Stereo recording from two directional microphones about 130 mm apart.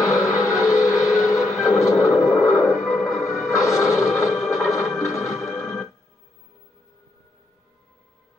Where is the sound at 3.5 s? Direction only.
25° left (ahead or behind).